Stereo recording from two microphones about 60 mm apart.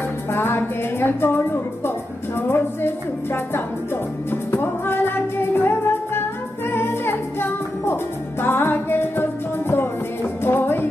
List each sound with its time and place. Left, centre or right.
0.3 s music: left